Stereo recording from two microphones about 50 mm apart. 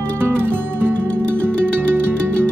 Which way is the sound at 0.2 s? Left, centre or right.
Right.